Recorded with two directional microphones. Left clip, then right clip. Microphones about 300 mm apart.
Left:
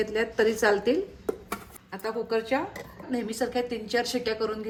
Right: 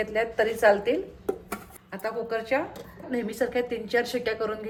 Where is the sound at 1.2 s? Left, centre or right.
Centre.